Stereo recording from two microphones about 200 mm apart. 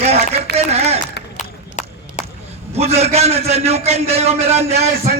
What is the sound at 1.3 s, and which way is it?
Run, 40° left (ahead or behind).